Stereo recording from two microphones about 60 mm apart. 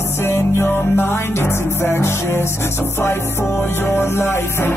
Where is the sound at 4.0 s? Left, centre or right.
Left.